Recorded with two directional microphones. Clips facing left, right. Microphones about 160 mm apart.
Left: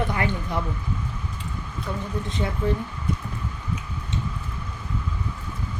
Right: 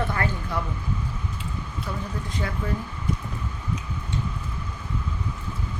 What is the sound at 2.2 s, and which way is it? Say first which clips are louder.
Speech: left 3 dB; 25° left (ahead or behind).